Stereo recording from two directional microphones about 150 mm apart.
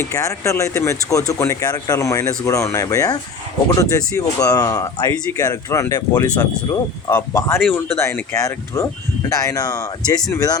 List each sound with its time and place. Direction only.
0.0 s speech: 20° left (ahead or behind)